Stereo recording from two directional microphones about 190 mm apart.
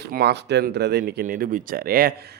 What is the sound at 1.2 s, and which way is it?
Speech, 45° right (ahead or behind).